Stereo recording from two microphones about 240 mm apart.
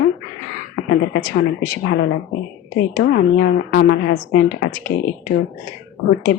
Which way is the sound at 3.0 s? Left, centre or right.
Left.